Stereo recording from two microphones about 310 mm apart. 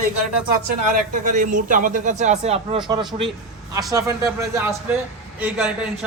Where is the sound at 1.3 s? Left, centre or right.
Right.